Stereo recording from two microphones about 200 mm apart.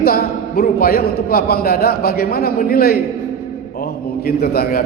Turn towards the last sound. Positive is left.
turn(degrees=50)  # may be behind; listen again after turning